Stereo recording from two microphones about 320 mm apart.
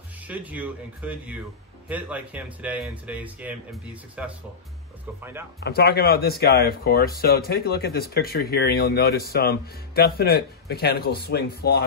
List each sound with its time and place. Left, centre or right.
0.3 s speech: centre
5.6 s speech: left